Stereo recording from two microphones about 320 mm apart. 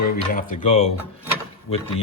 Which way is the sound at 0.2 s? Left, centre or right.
Left.